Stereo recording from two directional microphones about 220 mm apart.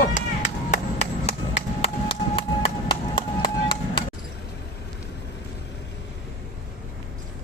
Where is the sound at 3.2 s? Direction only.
25° left (ahead or behind).